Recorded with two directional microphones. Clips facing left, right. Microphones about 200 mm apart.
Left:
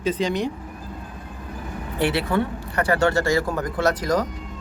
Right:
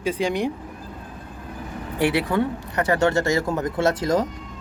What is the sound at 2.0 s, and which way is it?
Speech, 15° right (ahead or behind).